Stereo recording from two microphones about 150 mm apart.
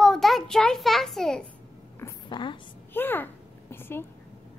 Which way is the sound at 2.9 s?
15° left (ahead or behind).